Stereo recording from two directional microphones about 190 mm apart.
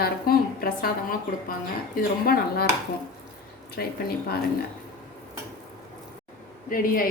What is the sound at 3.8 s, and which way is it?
Speech, 55° left (ahead or behind).